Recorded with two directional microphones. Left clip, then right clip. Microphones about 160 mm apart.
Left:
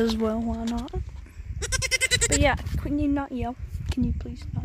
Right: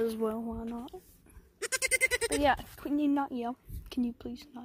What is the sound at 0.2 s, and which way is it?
Speech, 30° left (ahead or behind).